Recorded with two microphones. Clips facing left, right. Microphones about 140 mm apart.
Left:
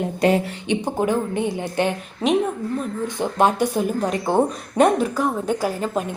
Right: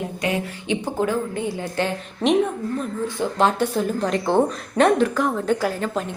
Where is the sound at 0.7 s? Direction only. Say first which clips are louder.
Left 2 dB; 20° left (ahead or behind).